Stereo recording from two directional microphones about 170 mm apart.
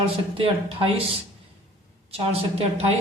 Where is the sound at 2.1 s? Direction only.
35° right (ahead or behind).